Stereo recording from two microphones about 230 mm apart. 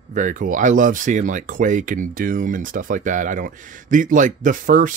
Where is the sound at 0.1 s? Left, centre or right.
Right.